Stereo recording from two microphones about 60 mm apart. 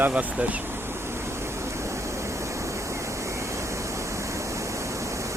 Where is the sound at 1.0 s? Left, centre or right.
Right.